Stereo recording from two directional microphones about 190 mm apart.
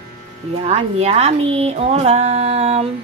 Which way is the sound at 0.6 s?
35° right (ahead or behind).